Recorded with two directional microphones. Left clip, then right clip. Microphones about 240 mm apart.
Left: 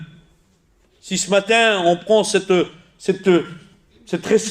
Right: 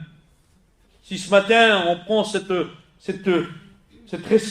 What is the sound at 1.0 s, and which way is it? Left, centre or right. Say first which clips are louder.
A man's voice: even; left.